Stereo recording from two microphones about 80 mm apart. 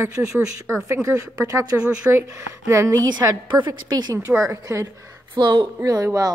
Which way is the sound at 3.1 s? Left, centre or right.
Right.